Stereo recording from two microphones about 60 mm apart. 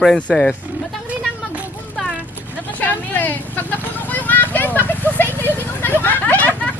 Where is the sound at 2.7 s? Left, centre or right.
Left.